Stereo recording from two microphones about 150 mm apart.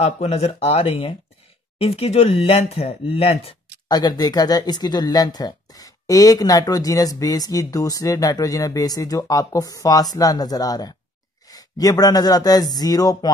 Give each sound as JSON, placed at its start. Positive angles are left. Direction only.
{"t": 0.0, "sound": "speech", "side_deg": 45}
{"t": 3.9, "sound": "speech", "side_deg": 25}